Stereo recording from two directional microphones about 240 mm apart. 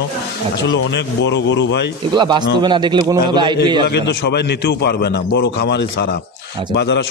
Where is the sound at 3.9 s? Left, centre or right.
Left.